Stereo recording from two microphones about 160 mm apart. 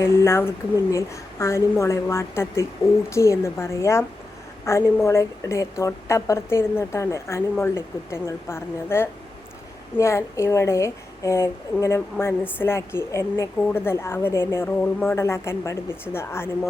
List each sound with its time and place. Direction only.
0.3 s a woman's voice: 15° left (ahead or behind)